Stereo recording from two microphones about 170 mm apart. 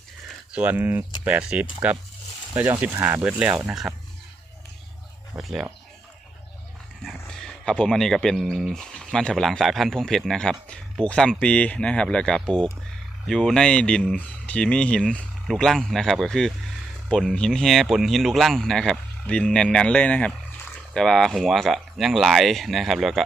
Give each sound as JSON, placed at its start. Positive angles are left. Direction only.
{"t": 0.5, "sound": "speech", "side_deg": -10}
{"t": 5.4, "sound": "speech", "side_deg": 0}
{"t": 7.0, "sound": "speech", "side_deg": 0}